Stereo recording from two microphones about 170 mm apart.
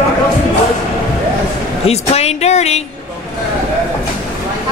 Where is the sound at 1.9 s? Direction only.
40° left (ahead or behind).